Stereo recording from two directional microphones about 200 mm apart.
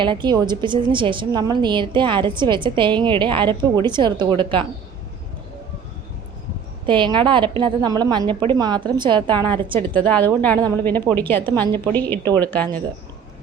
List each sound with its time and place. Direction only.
0.0 s a woman's voice: 25° right (ahead or behind)
6.8 s a woman's voice: 25° right (ahead or behind)
9.9 s a woman's voice: 5° left (ahead or behind)